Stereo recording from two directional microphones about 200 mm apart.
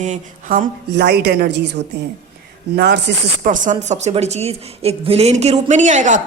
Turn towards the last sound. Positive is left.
turn(degrees=-40)  # may be behind; listen again after turning